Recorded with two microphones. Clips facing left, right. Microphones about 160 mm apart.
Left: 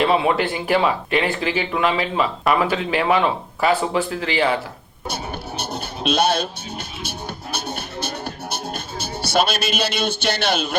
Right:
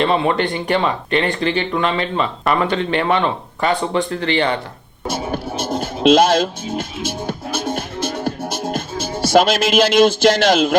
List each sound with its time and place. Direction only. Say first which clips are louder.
0.0 s speech: right 1 dB; 5° left (ahead or behind)
5.0 s music: right 6 dB; 90° right